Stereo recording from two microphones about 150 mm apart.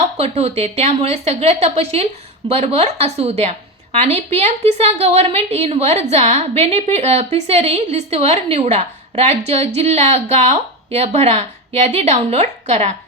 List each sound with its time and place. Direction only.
0.2 s a woman's voice: 45° right (ahead or behind)